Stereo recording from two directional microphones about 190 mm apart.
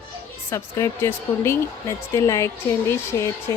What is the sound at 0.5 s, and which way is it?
Speech, 15° left (ahead or behind).